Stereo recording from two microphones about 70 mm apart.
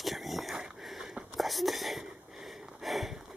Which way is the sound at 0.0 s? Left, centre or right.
Centre.